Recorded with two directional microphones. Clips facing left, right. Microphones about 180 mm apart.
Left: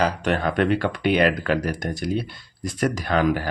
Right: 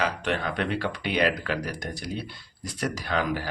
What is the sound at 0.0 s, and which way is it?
Speech, 45° left (ahead or behind).